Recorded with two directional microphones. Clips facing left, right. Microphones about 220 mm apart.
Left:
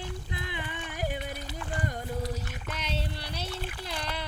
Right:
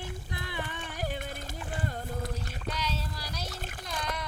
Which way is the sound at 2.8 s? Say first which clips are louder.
Left 1 dB; 30° left (ahead or behind).